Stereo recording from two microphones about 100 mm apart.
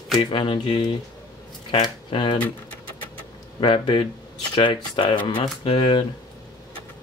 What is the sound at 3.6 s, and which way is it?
Speech, 60° left (ahead or behind).